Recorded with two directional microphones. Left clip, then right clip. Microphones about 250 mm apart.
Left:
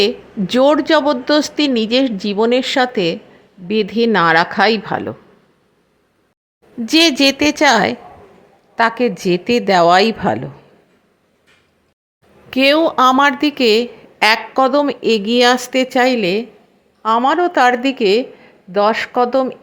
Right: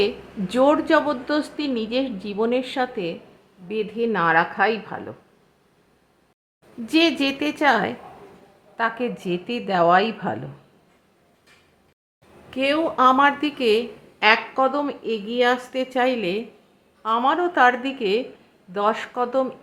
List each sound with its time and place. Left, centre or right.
0.0 s a woman's voice: left
6.8 s a woman's voice: left
12.5 s a woman's voice: left